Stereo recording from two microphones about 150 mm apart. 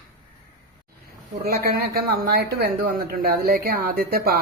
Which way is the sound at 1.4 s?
90° right.